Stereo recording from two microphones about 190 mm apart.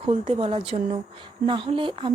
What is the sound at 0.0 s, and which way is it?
Speech, 30° right (ahead or behind).